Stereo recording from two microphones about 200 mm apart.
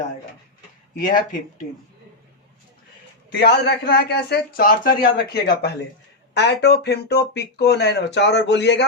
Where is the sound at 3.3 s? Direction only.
55° left (ahead or behind).